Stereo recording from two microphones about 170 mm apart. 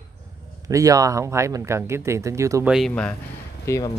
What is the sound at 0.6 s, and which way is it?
Speech, 20° right (ahead or behind).